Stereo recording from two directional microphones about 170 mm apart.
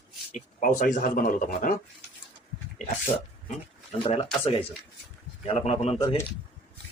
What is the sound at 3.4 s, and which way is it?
Speech, 40° left (ahead or behind).